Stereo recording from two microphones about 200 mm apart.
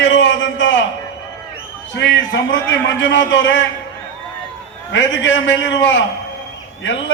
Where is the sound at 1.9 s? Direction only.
65° left (ahead or behind).